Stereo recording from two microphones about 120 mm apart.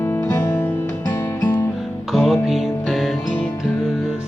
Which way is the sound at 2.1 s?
Centre (ahead or behind).